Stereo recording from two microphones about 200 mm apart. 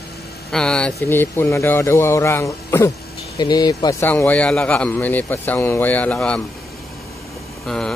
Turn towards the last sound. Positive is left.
turn(degrees=0)  # may be behind; listen again after turning